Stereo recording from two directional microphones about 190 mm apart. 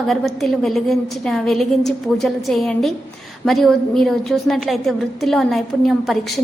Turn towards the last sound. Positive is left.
turn(degrees=0)  # may be behind; listen again after turning